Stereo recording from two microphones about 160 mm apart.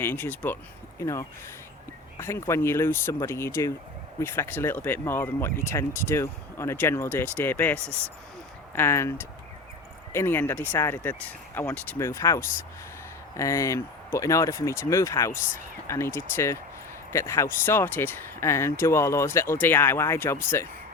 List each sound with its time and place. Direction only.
0.0 s speech: 10° left (ahead or behind)